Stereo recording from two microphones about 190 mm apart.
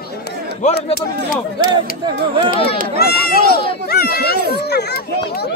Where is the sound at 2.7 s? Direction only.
55° left (ahead or behind).